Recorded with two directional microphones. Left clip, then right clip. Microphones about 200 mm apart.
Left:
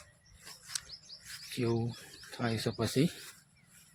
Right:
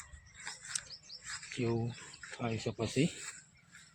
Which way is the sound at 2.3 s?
25° left (ahead or behind).